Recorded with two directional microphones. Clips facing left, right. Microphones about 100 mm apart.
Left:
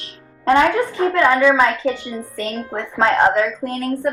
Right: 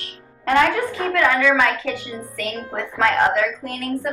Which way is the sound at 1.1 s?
25° left (ahead or behind).